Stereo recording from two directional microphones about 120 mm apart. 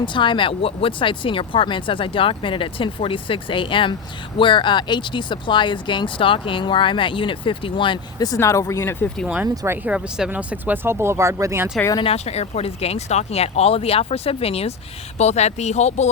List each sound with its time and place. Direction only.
0.0 s speech: 40° left (ahead or behind)
8.2 s speech: 25° left (ahead or behind)
9.1 s speech: 5° right (ahead or behind)
11.9 s speech: 55° left (ahead or behind)
15.2 s speech: 70° left (ahead or behind)